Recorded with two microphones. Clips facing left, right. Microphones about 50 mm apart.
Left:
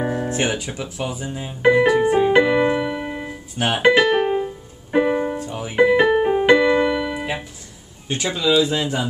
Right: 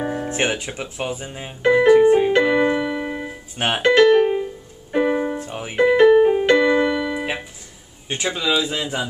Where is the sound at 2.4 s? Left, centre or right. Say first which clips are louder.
Even; centre.